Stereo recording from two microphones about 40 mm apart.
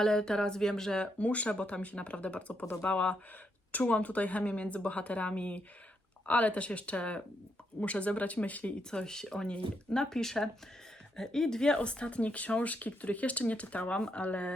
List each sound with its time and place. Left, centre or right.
0.0 s speech: centre
0.9 s speech: left
8.9 s speech: centre; by 14.5 s left